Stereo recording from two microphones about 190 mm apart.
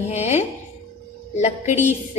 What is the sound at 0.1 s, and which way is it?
A woman's voice, 35° left (ahead or behind).